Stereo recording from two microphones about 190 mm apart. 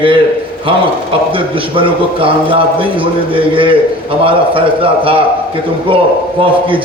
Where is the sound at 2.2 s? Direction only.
30° right (ahead or behind).